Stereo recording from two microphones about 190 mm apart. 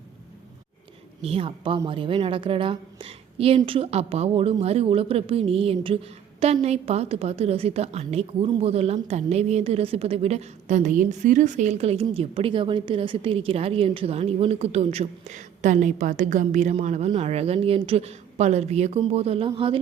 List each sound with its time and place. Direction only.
1.2 s a woman's voice: 30° right (ahead or behind)